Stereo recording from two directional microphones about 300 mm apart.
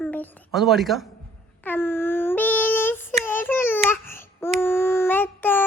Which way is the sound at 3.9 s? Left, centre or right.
Centre.